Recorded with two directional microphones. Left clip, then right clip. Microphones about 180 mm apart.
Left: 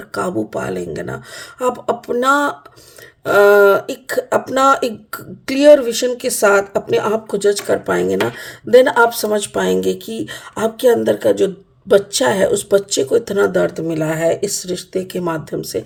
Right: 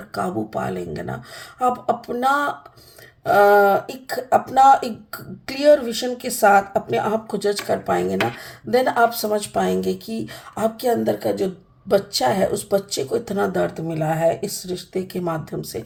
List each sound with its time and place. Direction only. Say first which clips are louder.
0.1 s speech: left 4 dB; 50° left (ahead or behind)